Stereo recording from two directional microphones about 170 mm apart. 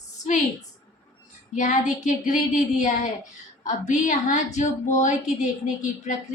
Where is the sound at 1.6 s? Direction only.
45° left (ahead or behind).